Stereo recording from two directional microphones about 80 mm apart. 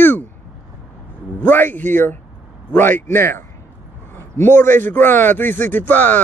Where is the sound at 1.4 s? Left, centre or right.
Left.